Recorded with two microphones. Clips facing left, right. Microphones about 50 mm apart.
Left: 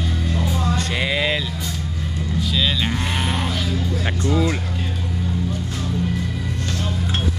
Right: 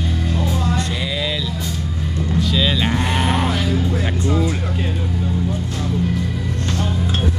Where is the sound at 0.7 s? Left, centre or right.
Left.